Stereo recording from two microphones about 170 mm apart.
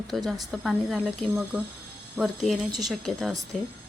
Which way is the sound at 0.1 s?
Centre (ahead or behind).